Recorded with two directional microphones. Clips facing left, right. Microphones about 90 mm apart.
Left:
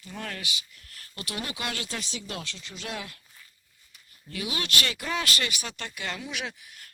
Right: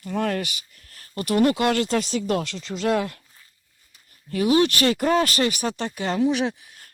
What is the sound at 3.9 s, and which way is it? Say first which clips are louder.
Speech: right 11 dB; 40° right (ahead or behind).